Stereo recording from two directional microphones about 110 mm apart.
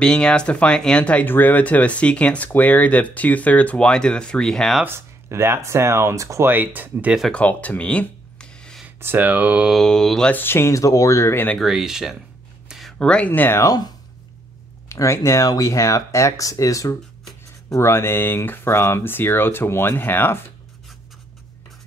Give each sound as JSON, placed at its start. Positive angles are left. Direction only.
{"t": 0.0, "sound": "speech", "side_deg": 10}
{"t": 4.8, "sound": "speech", "side_deg": -20}
{"t": 7.3, "sound": "a sound", "side_deg": 15}
{"t": 8.8, "sound": "speech", "side_deg": -15}
{"t": 9.7, "sound": "mantra", "side_deg": 5}
{"t": 10.3, "sound": "speech", "side_deg": 20}
{"t": 11.6, "sound": "mantra", "side_deg": -5}
{"t": 12.6, "sound": "speech", "side_deg": 0}
{"t": 13.7, "sound": "speech", "side_deg": 40}
{"t": 14.9, "sound": "speech", "side_deg": 25}